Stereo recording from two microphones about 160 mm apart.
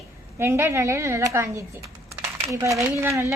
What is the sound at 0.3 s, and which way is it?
A woman's voice, 15° right (ahead or behind).